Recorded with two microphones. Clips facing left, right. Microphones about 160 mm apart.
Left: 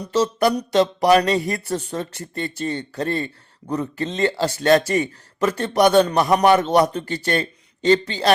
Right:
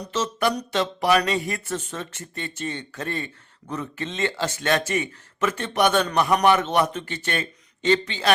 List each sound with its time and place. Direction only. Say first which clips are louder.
0.1 s speech: left 6 dB; 35° left (ahead or behind)